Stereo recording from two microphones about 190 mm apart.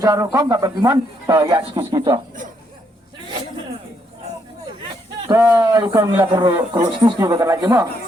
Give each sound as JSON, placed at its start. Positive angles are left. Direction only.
{"t": 0.0, "sound": "speech", "side_deg": -15}
{"t": 5.3, "sound": "speech", "side_deg": -20}